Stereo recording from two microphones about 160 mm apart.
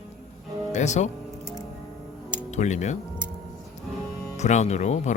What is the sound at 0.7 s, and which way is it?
Speech, 45° left (ahead or behind).